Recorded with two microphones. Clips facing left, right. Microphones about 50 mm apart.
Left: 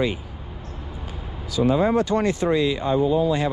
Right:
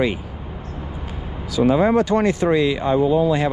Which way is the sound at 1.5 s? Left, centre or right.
Right.